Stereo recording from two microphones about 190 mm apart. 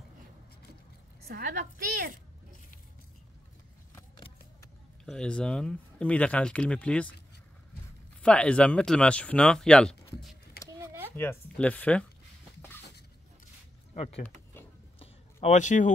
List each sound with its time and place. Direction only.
1.3 s a woman's voice: 50° right (ahead or behind)
3.9 s vehicle: 20° left (ahead or behind)
5.0 s speech: 5° left (ahead or behind)
8.2 s speech: 5° left (ahead or behind)
10.8 s a sound: 15° right (ahead or behind)
11.1 s speech: 10° left (ahead or behind)
13.9 s speech: 30° left (ahead or behind)
15.0 s a sound: 35° left (ahead or behind)